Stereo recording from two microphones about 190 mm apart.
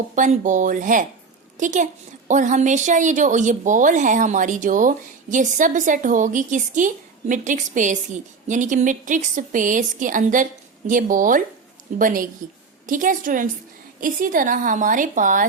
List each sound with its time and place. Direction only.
0.2 s a woman's voice: 40° right (ahead or behind)